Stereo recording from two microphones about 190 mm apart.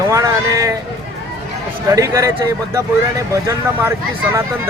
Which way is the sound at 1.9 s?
15° right (ahead or behind).